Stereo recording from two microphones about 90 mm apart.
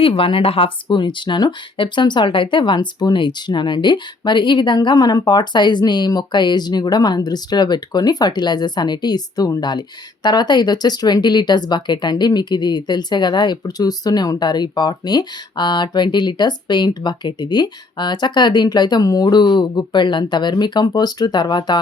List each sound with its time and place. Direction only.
0.0 s speech: 90° left; by 21.8 s 55° left (ahead or behind)